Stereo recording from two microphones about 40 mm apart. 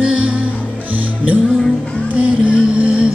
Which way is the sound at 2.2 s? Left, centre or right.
Right.